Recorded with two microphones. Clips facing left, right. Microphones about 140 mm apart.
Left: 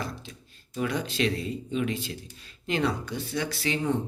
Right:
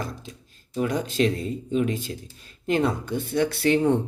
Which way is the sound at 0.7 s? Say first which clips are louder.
Right 4 dB; 40° right (ahead or behind).